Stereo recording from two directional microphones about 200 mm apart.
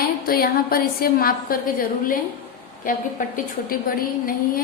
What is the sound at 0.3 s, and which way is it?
A woman's voice, 50° left (ahead or behind).